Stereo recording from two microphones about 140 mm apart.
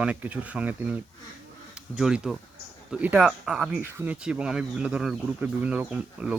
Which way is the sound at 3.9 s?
15° right (ahead or behind).